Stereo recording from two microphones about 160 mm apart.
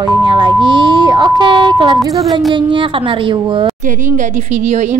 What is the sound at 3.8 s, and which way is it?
A woman's voice, 50° right (ahead or behind).